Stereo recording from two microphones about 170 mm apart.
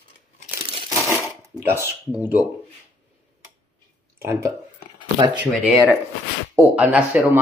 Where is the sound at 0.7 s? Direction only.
30° right (ahead or behind).